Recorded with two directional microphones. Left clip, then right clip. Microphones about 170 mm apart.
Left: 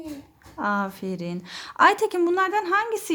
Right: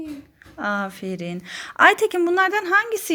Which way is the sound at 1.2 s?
Centre (ahead or behind).